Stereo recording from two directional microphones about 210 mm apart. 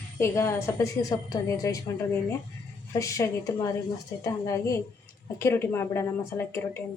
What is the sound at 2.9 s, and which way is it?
A woman's voice, 15° left (ahead or behind).